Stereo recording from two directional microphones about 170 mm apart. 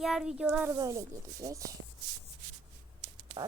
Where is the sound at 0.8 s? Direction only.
20° right (ahead or behind).